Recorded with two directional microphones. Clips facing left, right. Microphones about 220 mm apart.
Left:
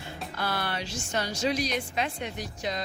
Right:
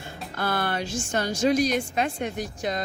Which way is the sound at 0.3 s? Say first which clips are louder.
Right 5 dB; 50° right (ahead or behind).